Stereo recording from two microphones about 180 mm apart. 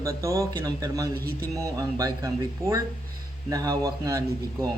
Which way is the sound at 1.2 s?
60° right (ahead or behind).